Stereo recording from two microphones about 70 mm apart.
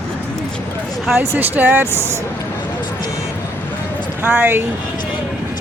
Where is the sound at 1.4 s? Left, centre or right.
Right.